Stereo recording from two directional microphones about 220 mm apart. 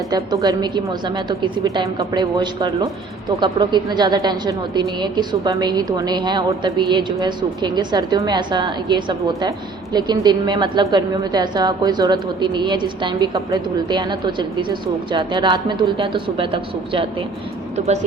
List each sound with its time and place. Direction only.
0.1 s a woman's voice: 20° right (ahead or behind)